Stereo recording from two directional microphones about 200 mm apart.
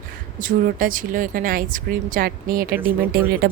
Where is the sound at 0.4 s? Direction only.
45° right (ahead or behind).